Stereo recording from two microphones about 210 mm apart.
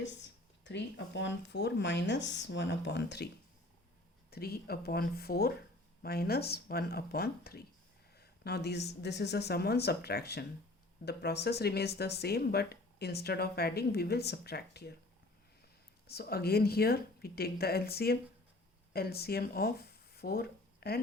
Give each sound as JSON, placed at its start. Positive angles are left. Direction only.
{"t": 0.0, "sound": "speech", "side_deg": 55}
{"t": 4.3, "sound": "speech", "side_deg": 45}
{"t": 16.0, "sound": "speech", "side_deg": 50}